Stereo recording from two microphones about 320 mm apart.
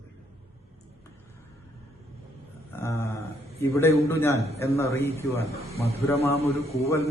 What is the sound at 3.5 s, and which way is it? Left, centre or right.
Mantra, centre.